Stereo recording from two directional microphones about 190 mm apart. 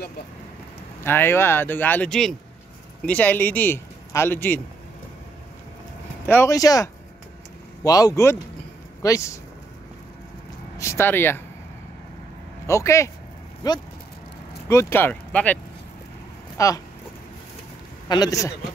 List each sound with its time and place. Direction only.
1.0 s a man's voice: 10° left (ahead or behind)
6.2 s a man's voice: 10° left (ahead or behind)
10.8 s speech: 15° left (ahead or behind)
12.6 s a man's voice: 15° left (ahead or behind)
18.0 s a man's voice: 20° left (ahead or behind)